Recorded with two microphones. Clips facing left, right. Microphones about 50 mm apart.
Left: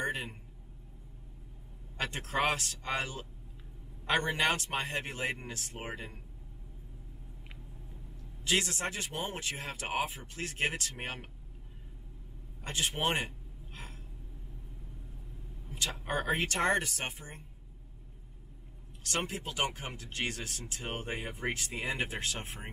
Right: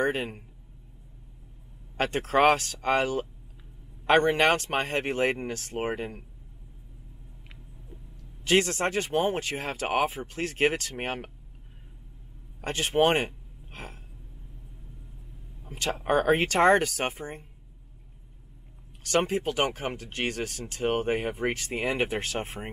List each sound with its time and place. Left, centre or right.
0.0 s a man's voice: right
2.0 s speech: right
8.5 s speech: right
12.6 s a sound: right
15.6 s speech: right
19.1 s speech: right